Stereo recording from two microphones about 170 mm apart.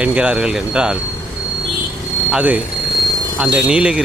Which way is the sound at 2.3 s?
5° right (ahead or behind).